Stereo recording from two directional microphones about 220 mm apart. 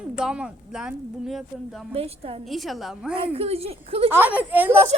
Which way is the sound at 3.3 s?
25° right (ahead or behind).